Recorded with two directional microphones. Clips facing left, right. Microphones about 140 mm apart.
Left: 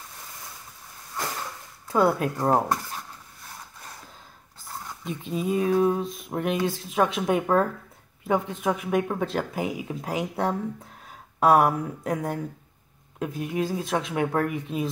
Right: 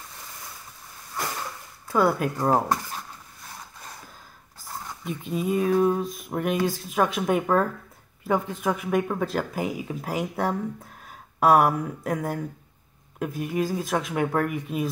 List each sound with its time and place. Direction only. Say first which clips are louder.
1.9 s speech: even; 25° left (ahead or behind)
2.5 s speech: even; 5° right (ahead or behind)
4.6 s a sound: right 1 dB; centre (ahead or behind)
5.2 s speech: right 1 dB; 30° left (ahead or behind)